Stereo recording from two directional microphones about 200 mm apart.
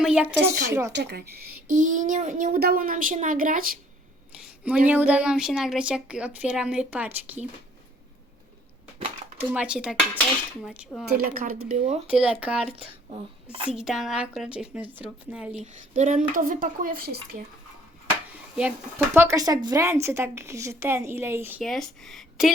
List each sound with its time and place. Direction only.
0.0 s a woman's voice: 5° right (ahead or behind)
1.3 s speech: 50° right (ahead or behind)
4.9 s a woman's voice: 10° right (ahead or behind)
9.4 s a woman's voice: 10° right (ahead or behind)
11.0 s a woman's voice: 45° right (ahead or behind)
11.7 s speech: 35° right (ahead or behind)
12.0 s a woman's voice: 5° right (ahead or behind)
13.1 s a child's voice: 25° right (ahead or behind)
13.7 s a woman's voice: centre (ahead or behind)
16.0 s a woman's voice: 40° right (ahead or behind)
19.1 s a woman's voice: 15° right (ahead or behind)
21.6 s a woman's voice: centre (ahead or behind)